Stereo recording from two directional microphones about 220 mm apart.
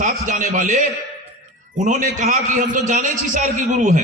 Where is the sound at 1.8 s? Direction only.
35° right (ahead or behind).